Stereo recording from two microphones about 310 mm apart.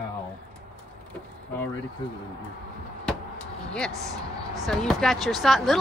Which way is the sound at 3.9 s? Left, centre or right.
Centre.